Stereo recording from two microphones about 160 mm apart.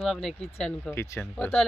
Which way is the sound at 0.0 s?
5° left (ahead or behind).